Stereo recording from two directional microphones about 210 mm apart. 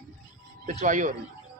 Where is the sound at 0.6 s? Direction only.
35° right (ahead or behind).